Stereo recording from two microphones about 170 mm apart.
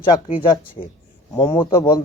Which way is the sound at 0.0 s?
30° left (ahead or behind).